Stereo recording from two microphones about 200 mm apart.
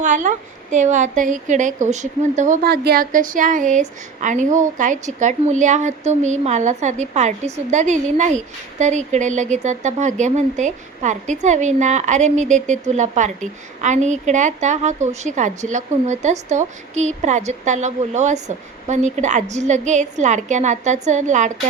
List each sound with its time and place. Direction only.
0.0 s a woman's voice: 40° right (ahead or behind)